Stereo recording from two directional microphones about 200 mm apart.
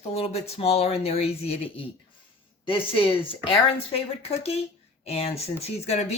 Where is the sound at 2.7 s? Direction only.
25° left (ahead or behind).